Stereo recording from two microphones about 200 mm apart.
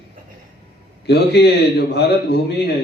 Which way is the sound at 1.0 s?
55° left (ahead or behind).